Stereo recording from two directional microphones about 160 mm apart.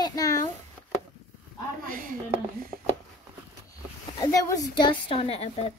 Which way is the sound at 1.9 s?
60° right (ahead or behind).